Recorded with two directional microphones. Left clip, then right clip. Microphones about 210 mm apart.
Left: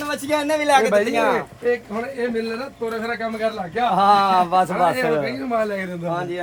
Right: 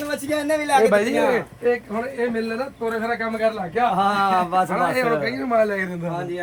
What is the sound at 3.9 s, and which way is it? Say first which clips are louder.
Speech: left 7 dB; 40° left (ahead or behind).